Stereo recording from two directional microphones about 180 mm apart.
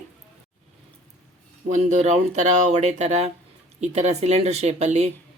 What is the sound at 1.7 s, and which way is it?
Speech, 40° right (ahead or behind).